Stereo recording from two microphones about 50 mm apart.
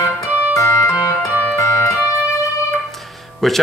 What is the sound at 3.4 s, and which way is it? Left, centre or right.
Speech, centre.